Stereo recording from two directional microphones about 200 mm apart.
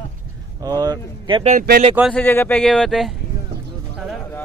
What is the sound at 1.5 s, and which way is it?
Speech, 50° right (ahead or behind).